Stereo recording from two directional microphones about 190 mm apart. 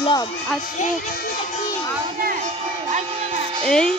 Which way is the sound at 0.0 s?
20° left (ahead or behind).